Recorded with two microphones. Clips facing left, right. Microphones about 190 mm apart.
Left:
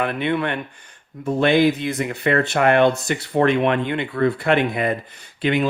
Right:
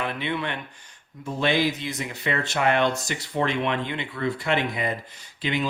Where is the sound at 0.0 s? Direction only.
55° left (ahead or behind).